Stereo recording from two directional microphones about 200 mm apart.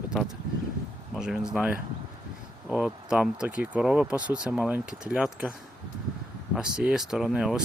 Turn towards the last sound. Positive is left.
turn(degrees=-5)  # may be behind; listen again after turning